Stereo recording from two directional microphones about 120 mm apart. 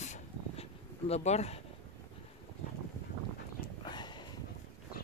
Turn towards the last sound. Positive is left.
turn(degrees=40)  # may be behind; listen again after turning